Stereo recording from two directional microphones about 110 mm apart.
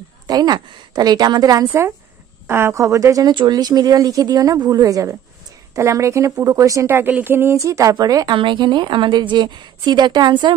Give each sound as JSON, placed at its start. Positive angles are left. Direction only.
{"t": 0.3, "sound": "speech", "side_deg": -35}
{"t": 1.7, "sound": "speech", "side_deg": -25}
{"t": 8.4, "sound": "a woman's voice", "side_deg": -45}